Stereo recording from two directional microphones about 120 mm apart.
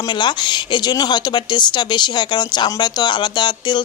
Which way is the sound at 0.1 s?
40° left (ahead or behind).